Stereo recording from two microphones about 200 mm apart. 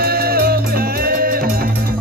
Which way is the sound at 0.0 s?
50° right (ahead or behind).